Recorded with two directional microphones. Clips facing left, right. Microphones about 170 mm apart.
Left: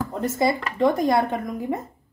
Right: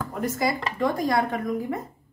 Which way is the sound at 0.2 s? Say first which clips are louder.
Left 3 dB; 25° left (ahead or behind).